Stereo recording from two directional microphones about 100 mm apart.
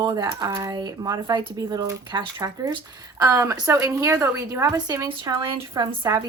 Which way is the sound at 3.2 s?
35° right (ahead or behind).